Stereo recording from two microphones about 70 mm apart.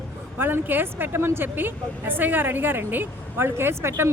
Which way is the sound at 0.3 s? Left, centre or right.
Right.